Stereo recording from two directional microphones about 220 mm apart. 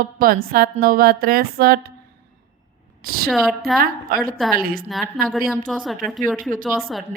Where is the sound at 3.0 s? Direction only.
45° right (ahead or behind).